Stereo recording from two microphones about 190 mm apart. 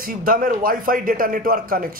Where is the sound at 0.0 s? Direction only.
45° right (ahead or behind).